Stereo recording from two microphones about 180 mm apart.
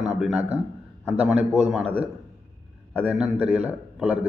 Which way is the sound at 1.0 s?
10° right (ahead or behind).